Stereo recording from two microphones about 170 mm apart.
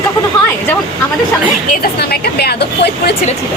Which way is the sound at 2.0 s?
70° left (ahead or behind).